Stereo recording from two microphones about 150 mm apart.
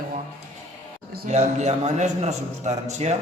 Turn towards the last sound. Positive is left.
turn(degrees=-50)  # may be behind; listen again after turning